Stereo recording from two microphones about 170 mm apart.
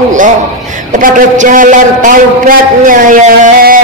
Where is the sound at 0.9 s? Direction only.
50° right (ahead or behind).